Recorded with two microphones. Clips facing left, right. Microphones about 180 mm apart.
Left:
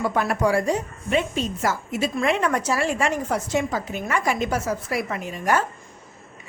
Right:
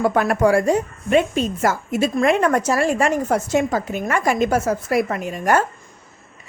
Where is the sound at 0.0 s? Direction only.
55° right (ahead or behind).